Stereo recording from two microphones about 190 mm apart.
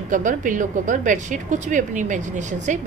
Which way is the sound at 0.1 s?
45° right (ahead or behind).